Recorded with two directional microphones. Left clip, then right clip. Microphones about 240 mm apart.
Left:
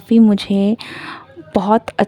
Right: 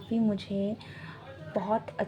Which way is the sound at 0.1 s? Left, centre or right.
Left.